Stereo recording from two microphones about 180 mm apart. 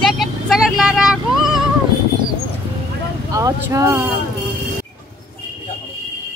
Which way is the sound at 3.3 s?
20° right (ahead or behind).